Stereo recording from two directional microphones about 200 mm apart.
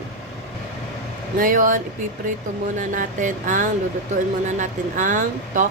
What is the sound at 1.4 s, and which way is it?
Speech, 40° right (ahead or behind).